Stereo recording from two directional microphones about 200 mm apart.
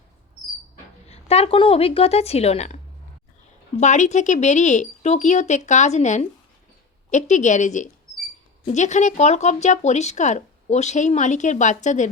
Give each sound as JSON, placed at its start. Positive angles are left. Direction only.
{"t": 1.0, "sound": "speech", "side_deg": 30}